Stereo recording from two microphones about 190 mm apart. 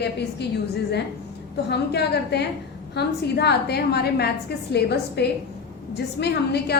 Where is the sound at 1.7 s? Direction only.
60° left (ahead or behind).